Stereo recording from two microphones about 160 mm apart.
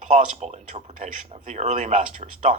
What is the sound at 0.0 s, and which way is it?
A man's voice, 45° right (ahead or behind).